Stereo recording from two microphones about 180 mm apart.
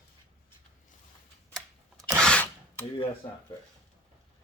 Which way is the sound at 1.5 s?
Centre (ahead or behind).